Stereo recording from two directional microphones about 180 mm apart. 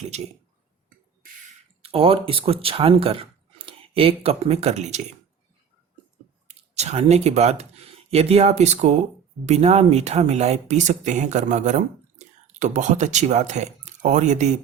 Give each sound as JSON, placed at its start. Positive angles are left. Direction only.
{"t": 1.8, "sound": "speech", "side_deg": -30}
{"t": 6.5, "sound": "speech", "side_deg": -35}